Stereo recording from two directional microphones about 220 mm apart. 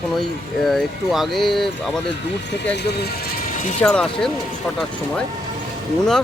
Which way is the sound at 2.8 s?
50° left (ahead or behind).